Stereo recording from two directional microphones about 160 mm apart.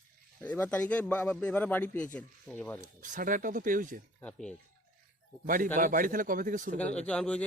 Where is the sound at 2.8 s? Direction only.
55° right (ahead or behind).